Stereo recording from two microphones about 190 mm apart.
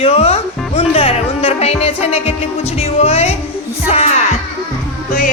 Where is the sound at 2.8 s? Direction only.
35° left (ahead or behind).